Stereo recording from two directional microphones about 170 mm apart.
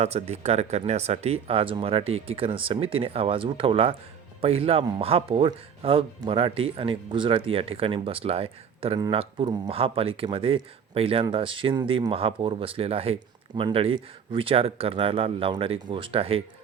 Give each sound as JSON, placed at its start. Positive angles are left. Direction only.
{"t": 0.0, "sound": "speech", "side_deg": -40}